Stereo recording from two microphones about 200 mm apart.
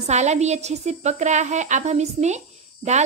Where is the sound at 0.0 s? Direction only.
35° right (ahead or behind).